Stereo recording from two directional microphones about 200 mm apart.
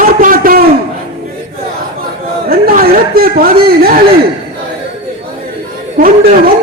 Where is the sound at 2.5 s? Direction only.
45° right (ahead or behind).